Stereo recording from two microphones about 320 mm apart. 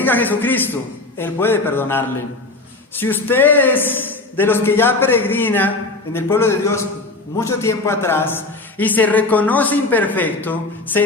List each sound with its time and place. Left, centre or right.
0.0 s a man's voice: centre